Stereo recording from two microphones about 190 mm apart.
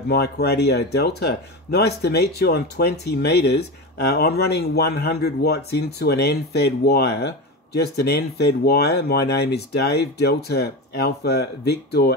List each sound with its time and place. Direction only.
0.1 s speech: 55° left (ahead or behind)